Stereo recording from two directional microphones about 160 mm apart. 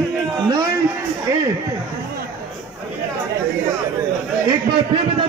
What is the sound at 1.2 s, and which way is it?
Speech, 20° right (ahead or behind).